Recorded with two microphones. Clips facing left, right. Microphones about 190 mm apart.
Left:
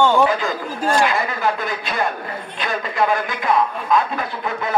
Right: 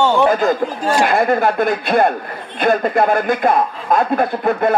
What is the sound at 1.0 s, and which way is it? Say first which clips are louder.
Speech: right 6 dB; 55° right (ahead or behind).